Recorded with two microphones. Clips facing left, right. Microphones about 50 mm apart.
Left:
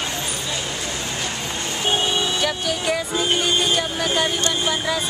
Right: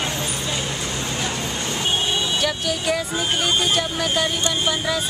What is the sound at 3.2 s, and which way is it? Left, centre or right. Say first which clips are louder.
Speech: left 1 dB; centre.